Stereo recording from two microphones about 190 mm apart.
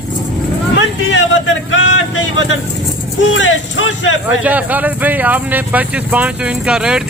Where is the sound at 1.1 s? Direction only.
80° left.